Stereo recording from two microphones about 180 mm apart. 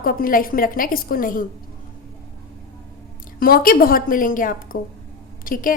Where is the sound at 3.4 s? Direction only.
55° left (ahead or behind).